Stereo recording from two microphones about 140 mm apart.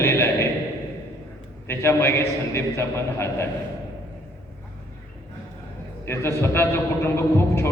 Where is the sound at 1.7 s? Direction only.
20° left (ahead or behind).